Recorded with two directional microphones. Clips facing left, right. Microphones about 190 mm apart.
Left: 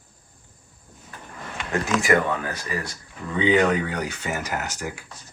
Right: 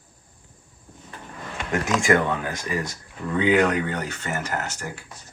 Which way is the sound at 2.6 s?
20° right (ahead or behind).